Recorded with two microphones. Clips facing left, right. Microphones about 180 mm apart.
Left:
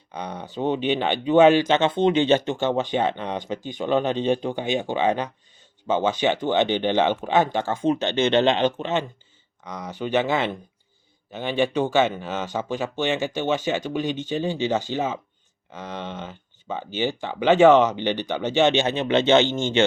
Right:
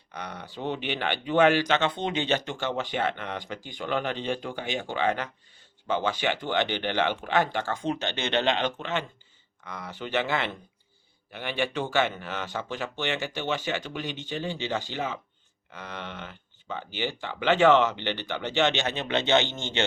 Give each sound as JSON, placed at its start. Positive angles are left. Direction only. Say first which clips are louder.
{"t": 0.3, "sound": "speech", "louder": "left 8 dB", "side_deg": 20}